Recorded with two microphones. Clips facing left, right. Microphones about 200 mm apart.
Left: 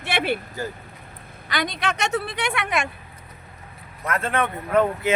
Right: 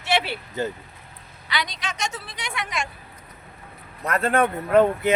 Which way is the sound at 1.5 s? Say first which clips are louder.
Left 4 dB; 50° left (ahead or behind).